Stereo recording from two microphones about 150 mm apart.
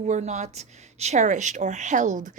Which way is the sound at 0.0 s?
50° right (ahead or behind).